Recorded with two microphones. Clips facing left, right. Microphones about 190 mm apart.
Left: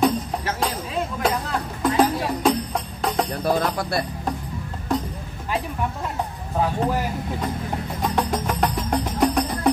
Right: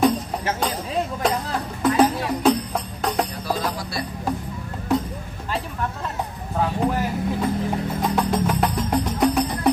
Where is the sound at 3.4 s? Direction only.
55° left (ahead or behind).